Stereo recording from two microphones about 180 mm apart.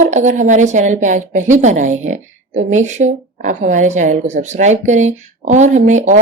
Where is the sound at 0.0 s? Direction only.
40° right (ahead or behind).